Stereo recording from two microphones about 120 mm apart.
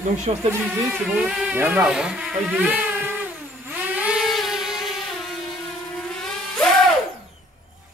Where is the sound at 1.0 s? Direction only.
5° right (ahead or behind).